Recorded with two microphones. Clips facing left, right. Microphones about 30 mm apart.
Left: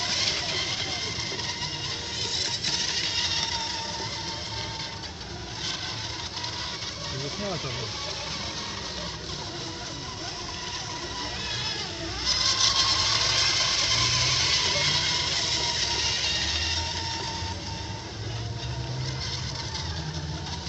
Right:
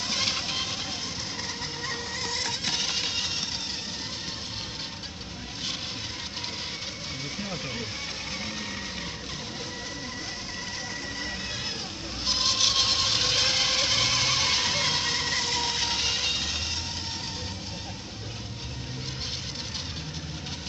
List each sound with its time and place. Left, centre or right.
0.0 s vehicle: left
2.2 s music: left
3.0 s music: left
12.4 s vehicle: left
13.4 s vehicle: right
14.2 s vehicle: left
15.9 s music: right
16.2 s music: left